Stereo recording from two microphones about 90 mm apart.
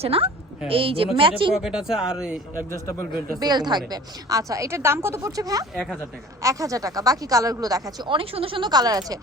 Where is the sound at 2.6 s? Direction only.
35° left (ahead or behind).